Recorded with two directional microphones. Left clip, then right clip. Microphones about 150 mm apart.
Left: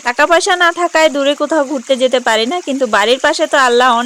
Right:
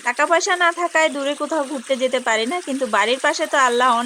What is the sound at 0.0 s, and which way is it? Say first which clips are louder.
Speech: left 7 dB; 50° left (ahead or behind).